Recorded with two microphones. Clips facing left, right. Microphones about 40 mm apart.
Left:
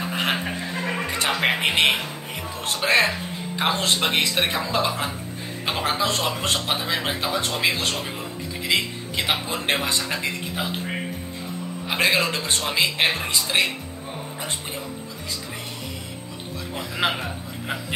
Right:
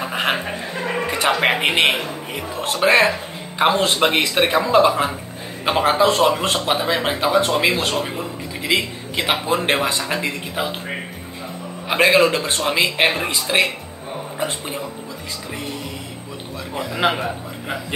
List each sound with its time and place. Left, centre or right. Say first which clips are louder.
0.0 s chuckle: right 3 dB; centre
0.7 s music: right 5 dB; centre
1.0 s speech: right 5 dB; centre
11.9 s speech: right 7 dB; centre
16.7 s a man's voice: right 5 dB; centre